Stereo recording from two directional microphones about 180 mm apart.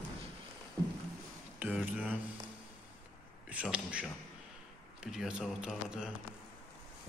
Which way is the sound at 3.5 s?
5° right (ahead or behind).